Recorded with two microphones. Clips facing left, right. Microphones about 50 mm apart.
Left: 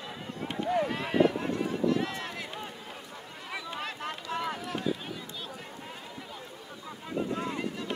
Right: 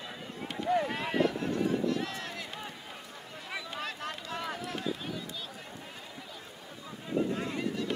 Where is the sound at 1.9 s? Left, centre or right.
Left.